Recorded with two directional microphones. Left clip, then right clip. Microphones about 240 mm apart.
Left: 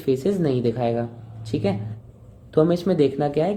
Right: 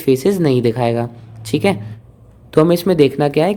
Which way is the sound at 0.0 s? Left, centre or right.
Right.